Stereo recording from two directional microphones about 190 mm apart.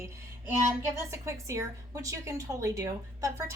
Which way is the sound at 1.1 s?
15° right (ahead or behind).